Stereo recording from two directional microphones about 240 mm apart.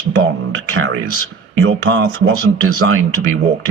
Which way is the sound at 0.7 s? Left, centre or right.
Right.